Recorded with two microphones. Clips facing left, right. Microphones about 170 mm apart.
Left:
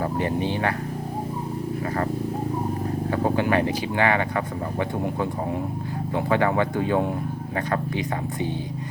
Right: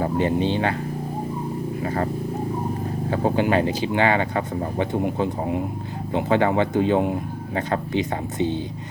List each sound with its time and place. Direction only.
0.0 s speech: 25° right (ahead or behind)
1.8 s speech: 25° right (ahead or behind)
3.1 s speech: 25° right (ahead or behind)